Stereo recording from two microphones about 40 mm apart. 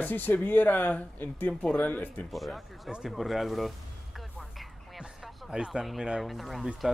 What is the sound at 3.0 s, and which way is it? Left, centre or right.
Music, centre.